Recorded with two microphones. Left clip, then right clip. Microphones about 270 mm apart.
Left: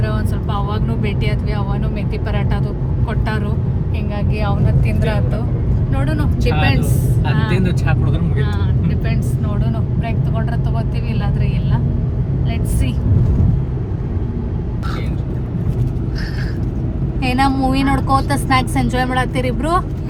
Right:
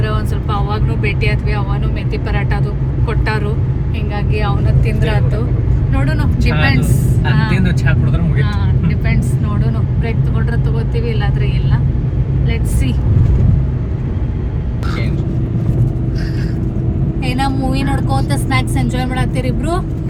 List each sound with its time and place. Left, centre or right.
4.4 s speech: centre
17.2 s speech: left